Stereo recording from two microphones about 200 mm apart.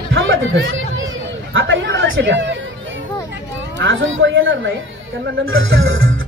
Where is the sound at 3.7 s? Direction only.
70° right (ahead or behind).